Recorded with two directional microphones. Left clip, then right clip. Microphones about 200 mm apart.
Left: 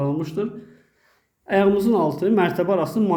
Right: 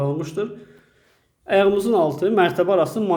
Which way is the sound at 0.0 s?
Centre (ahead or behind).